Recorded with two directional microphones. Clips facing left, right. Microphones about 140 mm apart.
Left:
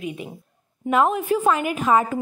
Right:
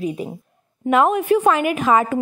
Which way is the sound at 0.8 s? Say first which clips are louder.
Right 4 dB; 70° right (ahead or behind).